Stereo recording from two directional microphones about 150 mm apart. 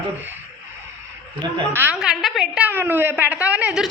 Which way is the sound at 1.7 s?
15° right (ahead or behind).